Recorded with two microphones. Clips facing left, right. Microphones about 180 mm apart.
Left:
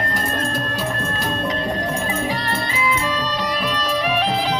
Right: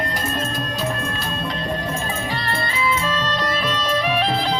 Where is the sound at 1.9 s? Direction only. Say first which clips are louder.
Left 3 dB; 15° left (ahead or behind).